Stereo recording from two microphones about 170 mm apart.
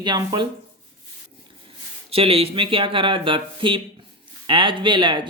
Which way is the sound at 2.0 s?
35° right (ahead or behind).